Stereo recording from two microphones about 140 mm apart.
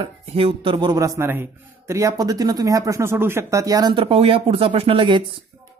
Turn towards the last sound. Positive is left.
turn(degrees=-35)  # may be behind; listen again after turning